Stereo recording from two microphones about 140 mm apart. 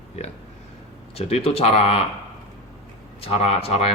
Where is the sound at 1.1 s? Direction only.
45° left (ahead or behind).